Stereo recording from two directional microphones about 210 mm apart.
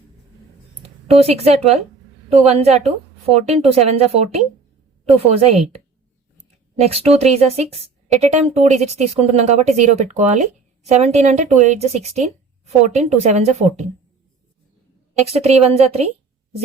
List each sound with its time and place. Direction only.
0.8 s a woman's voice: 30° right (ahead or behind)
15.3 s a woman's voice: 30° right (ahead or behind)